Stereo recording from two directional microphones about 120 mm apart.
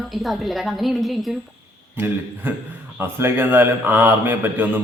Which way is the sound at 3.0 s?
20° right (ahead or behind).